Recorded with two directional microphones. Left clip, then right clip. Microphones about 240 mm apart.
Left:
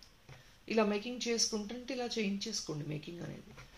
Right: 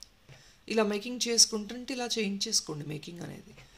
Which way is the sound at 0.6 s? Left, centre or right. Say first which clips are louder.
Right 3 dB; right.